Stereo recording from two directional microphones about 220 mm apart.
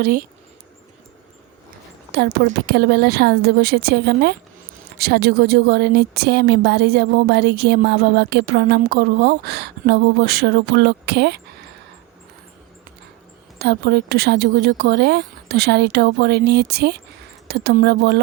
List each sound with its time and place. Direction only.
0.0 s speech: 40° right (ahead or behind)
2.1 s a woman's voice: 50° right (ahead or behind)
13.6 s a woman's voice: 50° right (ahead or behind)